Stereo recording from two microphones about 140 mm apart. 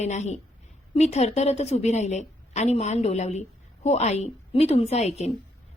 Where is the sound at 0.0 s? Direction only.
55° left (ahead or behind).